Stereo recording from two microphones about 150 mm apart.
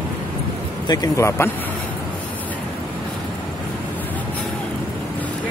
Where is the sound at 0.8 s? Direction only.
20° left (ahead or behind).